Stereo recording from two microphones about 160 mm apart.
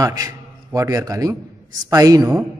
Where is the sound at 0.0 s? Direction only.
20° right (ahead or behind).